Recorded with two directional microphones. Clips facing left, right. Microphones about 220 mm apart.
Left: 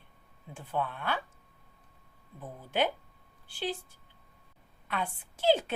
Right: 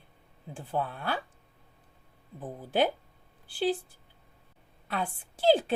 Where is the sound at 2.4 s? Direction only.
35° right (ahead or behind).